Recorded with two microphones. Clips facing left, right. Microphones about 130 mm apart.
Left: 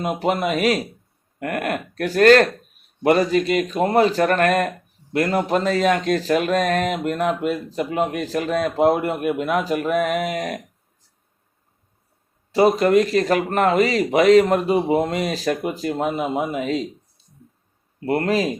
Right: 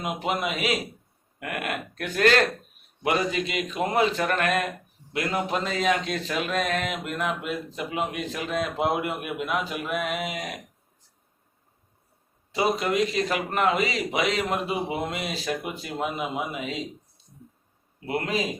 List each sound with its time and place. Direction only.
0.0 s speech: 40° left (ahead or behind)
12.5 s speech: 40° left (ahead or behind)
18.0 s speech: 45° left (ahead or behind)